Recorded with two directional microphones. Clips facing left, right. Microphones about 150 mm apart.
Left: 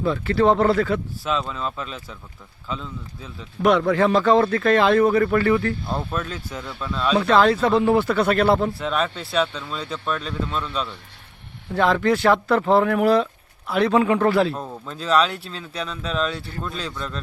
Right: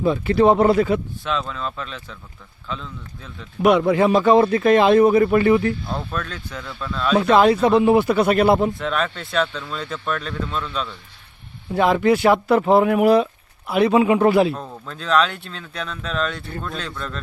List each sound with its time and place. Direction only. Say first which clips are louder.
0.0 s a man's voice: right 3 dB; 15° right (ahead or behind)
1.2 s speech: even; 5° left (ahead or behind)
3.6 s a man's voice: right 2 dB; 15° right (ahead or behind)
5.9 s speech: left 1 dB; 10° left (ahead or behind)
7.2 s a man's voice: right 3 dB; 15° right (ahead or behind)
8.8 s speech: even; centre (ahead or behind)
11.7 s a man's voice: right 2 dB; 15° right (ahead or behind)
14.5 s speech: even; 5° left (ahead or behind)